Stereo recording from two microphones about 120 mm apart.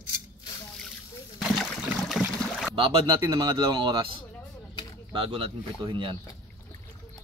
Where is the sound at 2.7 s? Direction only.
45° right (ahead or behind).